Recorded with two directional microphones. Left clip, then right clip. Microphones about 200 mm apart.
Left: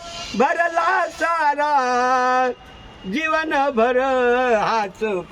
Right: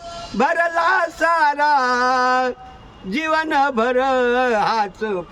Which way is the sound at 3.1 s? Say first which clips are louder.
Right 1 dB; 20° right (ahead or behind).